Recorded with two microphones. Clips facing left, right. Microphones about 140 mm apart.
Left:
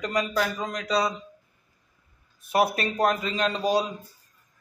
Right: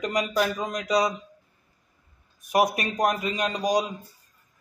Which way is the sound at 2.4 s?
15° right (ahead or behind).